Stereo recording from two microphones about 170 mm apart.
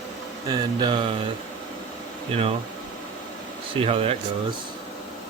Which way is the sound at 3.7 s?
35° right (ahead or behind).